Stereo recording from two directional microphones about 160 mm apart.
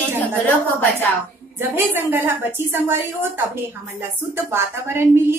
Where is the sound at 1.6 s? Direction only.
15° right (ahead or behind).